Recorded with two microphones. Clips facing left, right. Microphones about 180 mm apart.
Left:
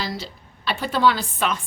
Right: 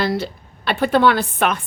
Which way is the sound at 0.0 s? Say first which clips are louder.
Right 9 dB; 60° right (ahead or behind).